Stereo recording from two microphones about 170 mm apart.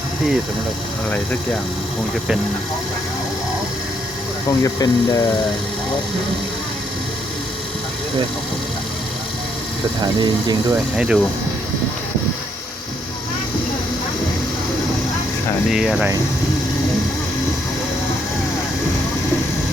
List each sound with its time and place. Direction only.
4.6 s speech: 20° left (ahead or behind)
10.0 s speech: 25° right (ahead or behind)
10.9 s speech: 5° right (ahead or behind)
15.7 s speech: 5° right (ahead or behind)